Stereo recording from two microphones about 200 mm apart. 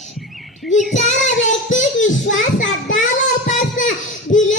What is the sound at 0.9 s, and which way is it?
Child singing, 35° left (ahead or behind).